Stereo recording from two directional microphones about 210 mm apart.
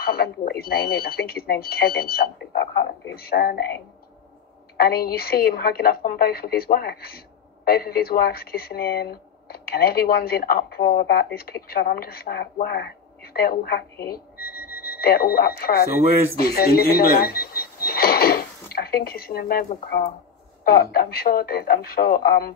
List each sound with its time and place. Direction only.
0.0 s a woman's voice: 45° left (ahead or behind)
4.7 s a woman's voice: 45° left (ahead or behind)
20.6 s a woman's voice: 45° left (ahead or behind)